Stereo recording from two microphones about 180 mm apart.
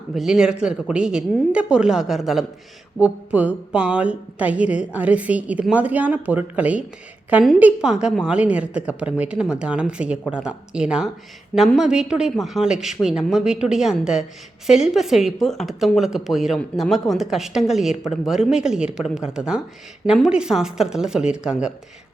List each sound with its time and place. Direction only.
0.1 s speech: centre (ahead or behind)